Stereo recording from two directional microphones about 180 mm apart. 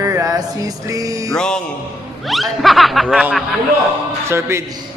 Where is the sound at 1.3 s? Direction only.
5° left (ahead or behind).